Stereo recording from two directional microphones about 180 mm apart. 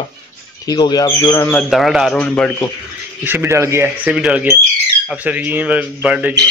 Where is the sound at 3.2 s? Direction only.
10° right (ahead or behind).